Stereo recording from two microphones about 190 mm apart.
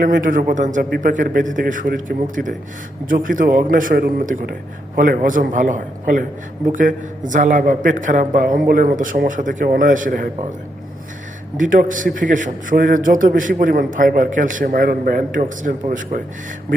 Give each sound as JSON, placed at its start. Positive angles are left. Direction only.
{"t": 0.0, "sound": "a man's voice", "side_deg": -45}
{"t": 11.5, "sound": "a man's voice", "side_deg": -45}